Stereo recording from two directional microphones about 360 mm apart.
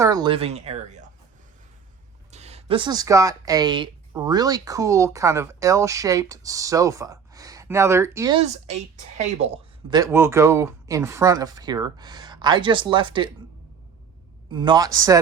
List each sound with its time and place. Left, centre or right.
0.0 s speech: centre
2.3 s speech: centre
9.9 s speech: centre
14.5 s speech: centre